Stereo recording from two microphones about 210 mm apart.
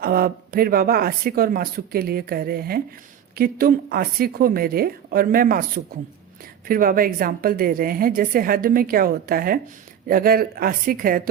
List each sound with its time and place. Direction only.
0.0 s a woman's voice: 45° right (ahead or behind)